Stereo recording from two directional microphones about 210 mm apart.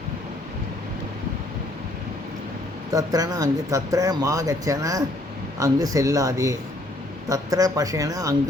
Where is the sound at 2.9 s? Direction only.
15° right (ahead or behind).